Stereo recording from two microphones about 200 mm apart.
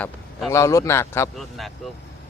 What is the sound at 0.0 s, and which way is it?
A man's voice, 10° left (ahead or behind).